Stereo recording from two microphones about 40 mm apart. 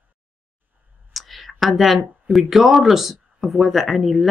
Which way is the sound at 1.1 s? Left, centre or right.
Centre.